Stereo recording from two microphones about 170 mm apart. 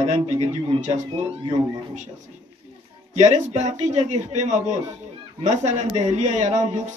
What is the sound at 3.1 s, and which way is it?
Speech, 40° right (ahead or behind).